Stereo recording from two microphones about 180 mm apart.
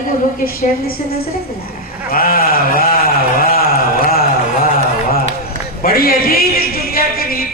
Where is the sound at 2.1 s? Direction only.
55° left (ahead or behind).